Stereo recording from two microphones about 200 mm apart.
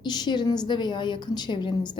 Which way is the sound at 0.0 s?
20° left (ahead or behind).